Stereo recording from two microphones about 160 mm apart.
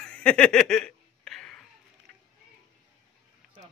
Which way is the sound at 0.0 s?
5° left (ahead or behind).